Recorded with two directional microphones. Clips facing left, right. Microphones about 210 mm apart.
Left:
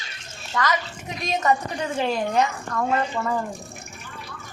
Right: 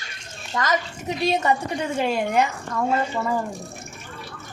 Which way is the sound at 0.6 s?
25° right (ahead or behind).